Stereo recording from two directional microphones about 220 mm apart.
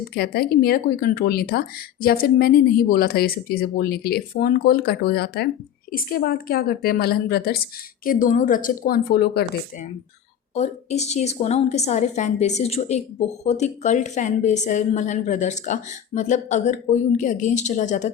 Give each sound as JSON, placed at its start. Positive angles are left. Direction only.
{"t": 0.1, "sound": "a woman's voice", "side_deg": 45}
{"t": 10.5, "sound": "a woman's voice", "side_deg": 30}